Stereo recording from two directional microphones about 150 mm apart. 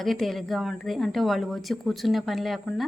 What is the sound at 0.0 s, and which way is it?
A woman's voice, centre (ahead or behind).